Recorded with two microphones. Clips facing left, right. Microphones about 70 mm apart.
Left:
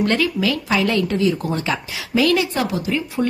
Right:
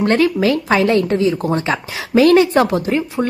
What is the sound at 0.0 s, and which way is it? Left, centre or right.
Speech, right.